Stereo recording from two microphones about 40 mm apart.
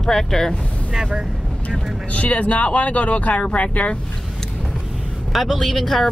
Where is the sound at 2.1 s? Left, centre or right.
Left.